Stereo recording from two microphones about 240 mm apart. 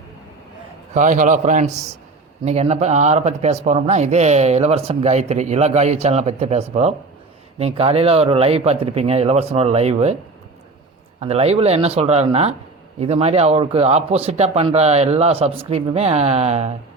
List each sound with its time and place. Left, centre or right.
0.9 s a man's voice: right
11.2 s speech: right